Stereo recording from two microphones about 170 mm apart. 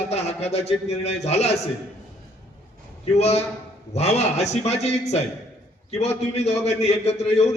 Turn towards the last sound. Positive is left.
turn(degrees=40)  # may be behind; listen again after turning